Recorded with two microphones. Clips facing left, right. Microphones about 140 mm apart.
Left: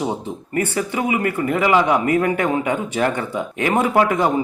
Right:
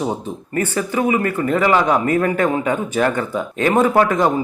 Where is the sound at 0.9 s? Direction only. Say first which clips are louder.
Right 7 dB; 35° right (ahead or behind).